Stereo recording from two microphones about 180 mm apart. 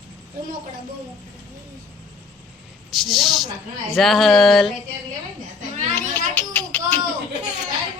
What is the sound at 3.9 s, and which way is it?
Speech, centre (ahead or behind).